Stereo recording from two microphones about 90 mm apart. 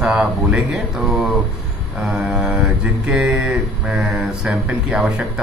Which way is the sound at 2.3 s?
10° right (ahead or behind).